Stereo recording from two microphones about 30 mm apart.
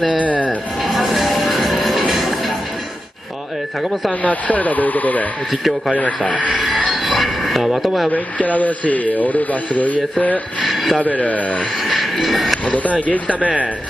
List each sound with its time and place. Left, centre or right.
0.2 s speech: left
0.8 s music: centre
4.2 s speech: left
5.9 s speech: left
6.9 s train: centre
7.8 s speech: centre
8.1 s speech: left
10.6 s a sound: centre
11.0 s speech: left
11.8 s speech: centre
12.6 s speech: left